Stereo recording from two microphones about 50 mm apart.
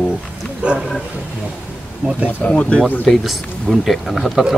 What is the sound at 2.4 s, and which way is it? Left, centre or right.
Speech, left.